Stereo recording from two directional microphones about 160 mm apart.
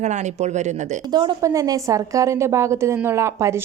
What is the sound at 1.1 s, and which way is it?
A woman's voice, 25° right (ahead or behind).